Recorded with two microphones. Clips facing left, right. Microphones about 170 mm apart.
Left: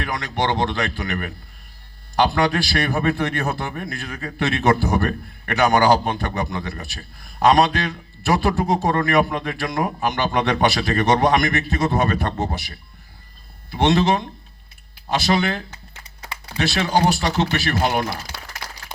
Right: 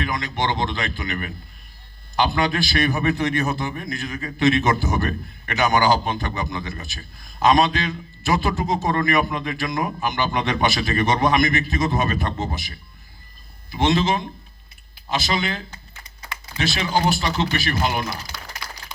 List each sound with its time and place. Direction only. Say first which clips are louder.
0.0 s a man's voice: left 1 dB; 65° left (ahead or behind)
13.7 s a man's voice: left 2 dB; 65° left (ahead or behind)